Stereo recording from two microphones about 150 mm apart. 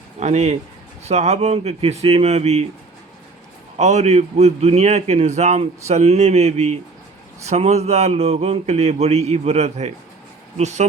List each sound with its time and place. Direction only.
0.2 s a man's voice: 50° right (ahead or behind)
3.8 s a man's voice: 50° right (ahead or behind)